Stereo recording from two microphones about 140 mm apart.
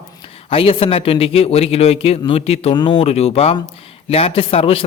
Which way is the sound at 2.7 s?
30° left (ahead or behind).